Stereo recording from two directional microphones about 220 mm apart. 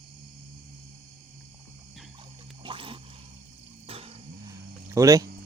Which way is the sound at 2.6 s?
25° right (ahead or behind).